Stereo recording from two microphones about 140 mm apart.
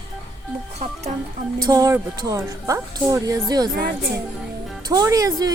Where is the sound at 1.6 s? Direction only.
25° right (ahead or behind).